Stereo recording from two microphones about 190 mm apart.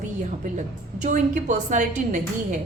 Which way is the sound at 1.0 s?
40° right (ahead or behind).